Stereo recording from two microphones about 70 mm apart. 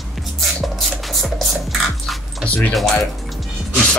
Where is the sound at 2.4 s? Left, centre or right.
Left.